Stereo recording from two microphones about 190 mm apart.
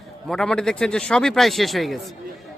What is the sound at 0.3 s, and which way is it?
Speech, 5° left (ahead or behind).